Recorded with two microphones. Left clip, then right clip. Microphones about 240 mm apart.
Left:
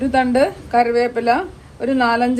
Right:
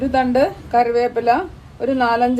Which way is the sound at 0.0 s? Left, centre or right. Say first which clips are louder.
Even; left.